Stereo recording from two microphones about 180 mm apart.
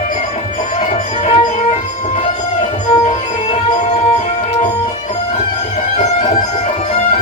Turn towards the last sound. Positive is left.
turn(degrees=40)  # may be behind; listen again after turning